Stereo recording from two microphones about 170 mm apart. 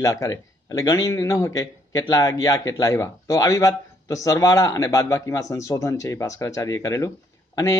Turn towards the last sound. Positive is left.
turn(degrees=20)  # may be behind; listen again after turning